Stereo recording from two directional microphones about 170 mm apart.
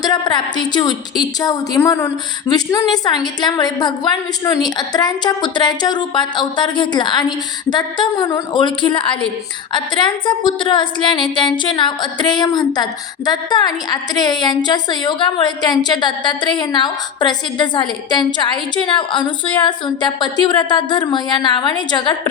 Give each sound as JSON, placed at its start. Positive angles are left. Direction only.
{"t": 0.0, "sound": "a woman's voice", "side_deg": 25}